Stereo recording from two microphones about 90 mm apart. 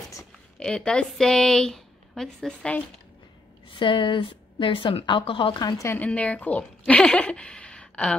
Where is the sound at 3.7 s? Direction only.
65° left (ahead or behind).